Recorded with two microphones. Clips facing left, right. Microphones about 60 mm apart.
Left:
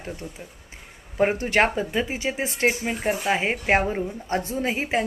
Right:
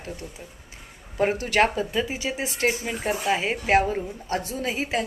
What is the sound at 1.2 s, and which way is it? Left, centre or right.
Speech, left.